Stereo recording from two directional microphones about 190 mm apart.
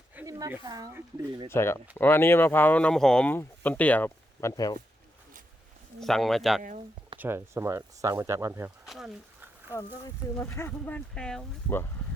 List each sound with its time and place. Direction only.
0.2 s speech: 15° right (ahead or behind)
1.5 s speech: 15° left (ahead or behind)
6.0 s speech: centre (ahead or behind)
6.6 s speech: 40° right (ahead or behind)
7.2 s speech: 10° right (ahead or behind)
8.9 s speech: centre (ahead or behind)
10.3 s speech: 10° left (ahead or behind)